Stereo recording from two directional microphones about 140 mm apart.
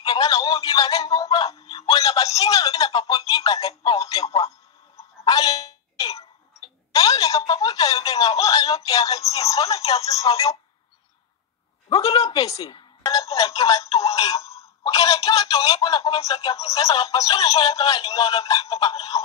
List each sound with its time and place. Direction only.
0.0 s a sound: 25° left (ahead or behind)
0.7 s speech: 25° left (ahead or behind)
5.2 s wail: 25° left (ahead or behind)
8.1 s speech: 25° left (ahead or behind)
12.0 s speech: 25° left (ahead or behind)
14.3 s a sound: 20° left (ahead or behind)
14.8 s speech: 25° left (ahead or behind)